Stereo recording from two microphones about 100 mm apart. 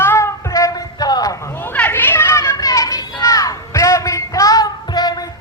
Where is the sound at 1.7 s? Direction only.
15° left (ahead or behind); by 5.2 s 45° left (ahead or behind).